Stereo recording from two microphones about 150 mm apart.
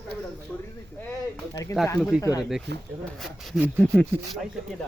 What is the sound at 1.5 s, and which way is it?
Speech, 20° left (ahead or behind).